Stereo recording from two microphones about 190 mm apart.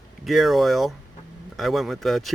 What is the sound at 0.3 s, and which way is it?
Speech, centre (ahead or behind).